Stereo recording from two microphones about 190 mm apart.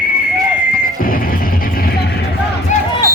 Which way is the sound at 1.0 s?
50° left (ahead or behind).